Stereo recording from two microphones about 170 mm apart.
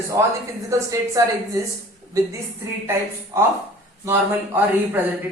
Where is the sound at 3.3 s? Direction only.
15° right (ahead or behind).